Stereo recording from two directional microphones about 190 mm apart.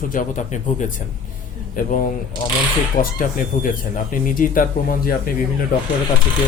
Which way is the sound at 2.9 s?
45° left (ahead or behind).